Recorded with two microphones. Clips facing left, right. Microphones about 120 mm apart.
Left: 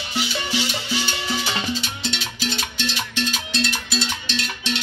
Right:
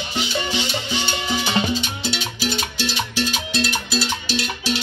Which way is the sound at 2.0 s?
10° right (ahead or behind).